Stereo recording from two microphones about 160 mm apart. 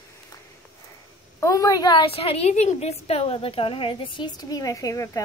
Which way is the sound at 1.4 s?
20° left (ahead or behind).